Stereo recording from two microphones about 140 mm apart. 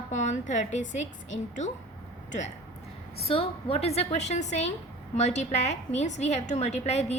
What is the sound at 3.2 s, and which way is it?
A woman's voice, 40° left (ahead or behind).